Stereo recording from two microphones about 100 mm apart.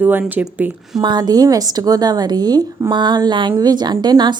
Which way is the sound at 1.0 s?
45° right (ahead or behind).